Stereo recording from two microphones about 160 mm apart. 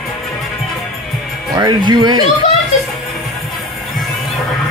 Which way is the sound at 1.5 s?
25° right (ahead or behind).